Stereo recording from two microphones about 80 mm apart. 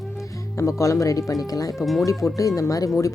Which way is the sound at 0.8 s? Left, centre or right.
Left.